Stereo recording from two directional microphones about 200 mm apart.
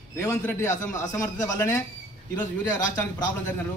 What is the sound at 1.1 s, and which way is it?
Speech, 15° left (ahead or behind).